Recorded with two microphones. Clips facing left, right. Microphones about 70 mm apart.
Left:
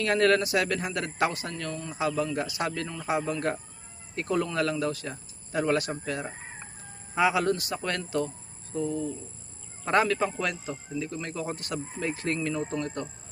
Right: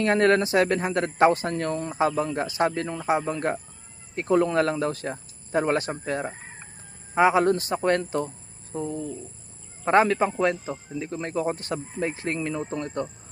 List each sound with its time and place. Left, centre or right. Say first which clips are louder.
0.0 s speech: right 3 dB; right
8.7 s cricket: even; right
9.8 s speech: right 5 dB; right